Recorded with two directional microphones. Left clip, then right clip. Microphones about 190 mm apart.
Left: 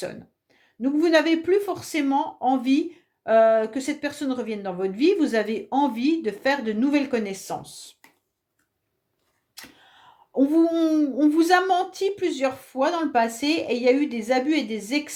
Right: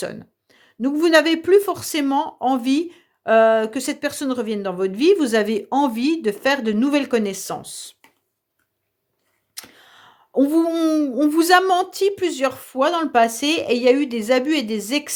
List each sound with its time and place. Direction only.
0.0 s speech: 45° right (ahead or behind)
9.6 s speech: 50° right (ahead or behind)